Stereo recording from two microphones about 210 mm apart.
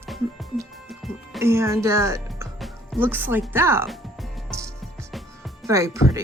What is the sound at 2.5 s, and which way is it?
Music, centre (ahead or behind).